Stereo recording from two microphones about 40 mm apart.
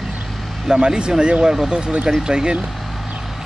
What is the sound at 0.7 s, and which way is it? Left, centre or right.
Speech, right.